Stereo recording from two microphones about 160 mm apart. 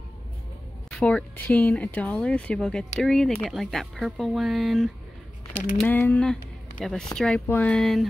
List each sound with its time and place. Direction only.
0.8 s speech: 10° left (ahead or behind)
5.8 s speech: 10° left (ahead or behind)